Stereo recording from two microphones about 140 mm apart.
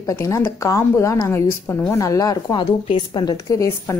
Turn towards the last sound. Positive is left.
turn(degrees=20)  # may be behind; listen again after turning